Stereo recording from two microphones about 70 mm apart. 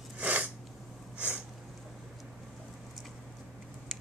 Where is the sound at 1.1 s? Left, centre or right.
Centre.